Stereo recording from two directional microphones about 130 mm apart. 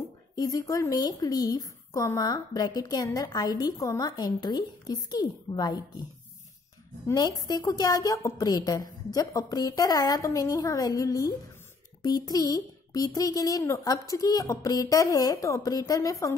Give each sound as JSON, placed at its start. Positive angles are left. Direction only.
{"t": 0.4, "sound": "speech", "side_deg": 30}
{"t": 7.1, "sound": "speech", "side_deg": 30}